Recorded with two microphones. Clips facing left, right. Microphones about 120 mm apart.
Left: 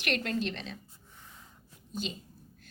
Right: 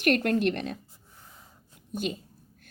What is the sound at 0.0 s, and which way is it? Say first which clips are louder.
Speech: right 8 dB; 50° right (ahead or behind).